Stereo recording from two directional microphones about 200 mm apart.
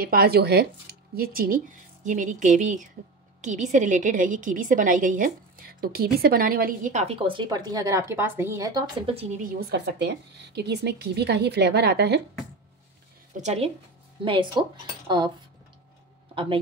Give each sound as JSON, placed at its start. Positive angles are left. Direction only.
{"t": 0.0, "sound": "a woman's voice", "side_deg": -50}
{"t": 9.0, "sound": "speech", "side_deg": -30}
{"t": 9.4, "sound": "speech", "side_deg": -50}
{"t": 13.4, "sound": "a woman's voice", "side_deg": -35}